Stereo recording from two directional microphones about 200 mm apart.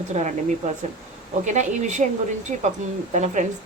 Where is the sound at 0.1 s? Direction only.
35° right (ahead or behind).